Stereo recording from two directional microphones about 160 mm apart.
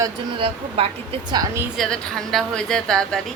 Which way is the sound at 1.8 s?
5° left (ahead or behind).